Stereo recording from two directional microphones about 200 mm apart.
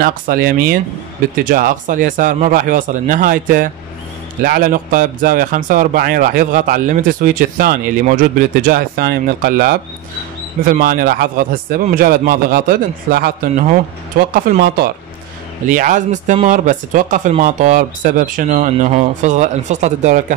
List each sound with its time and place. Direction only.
0.0 s a man's voice: 45° right (ahead or behind)
15.7 s speech: 40° right (ahead or behind)